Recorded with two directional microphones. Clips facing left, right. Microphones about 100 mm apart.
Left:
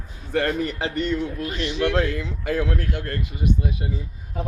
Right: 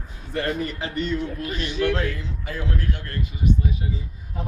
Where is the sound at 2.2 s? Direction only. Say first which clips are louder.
Left 6 dB; 65° left (ahead or behind).